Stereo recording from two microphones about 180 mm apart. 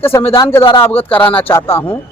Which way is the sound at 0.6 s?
30° left (ahead or behind).